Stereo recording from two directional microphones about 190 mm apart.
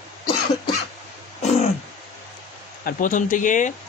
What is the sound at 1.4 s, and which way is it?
Throat clearing, 35° left (ahead or behind).